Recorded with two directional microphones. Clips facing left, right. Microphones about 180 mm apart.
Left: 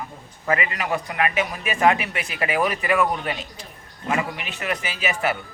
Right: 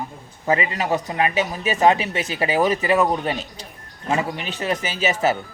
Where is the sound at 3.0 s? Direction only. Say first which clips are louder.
Right 3 dB; 35° right (ahead or behind).